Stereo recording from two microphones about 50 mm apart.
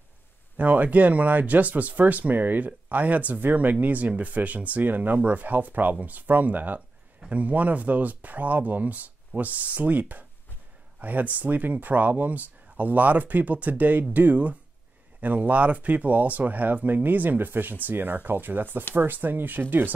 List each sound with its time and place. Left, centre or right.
0.6 s speech: right